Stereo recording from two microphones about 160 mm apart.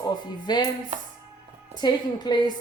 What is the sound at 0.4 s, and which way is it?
Speech, 25° left (ahead or behind).